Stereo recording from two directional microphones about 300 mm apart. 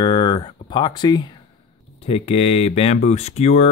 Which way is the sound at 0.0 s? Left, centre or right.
Centre.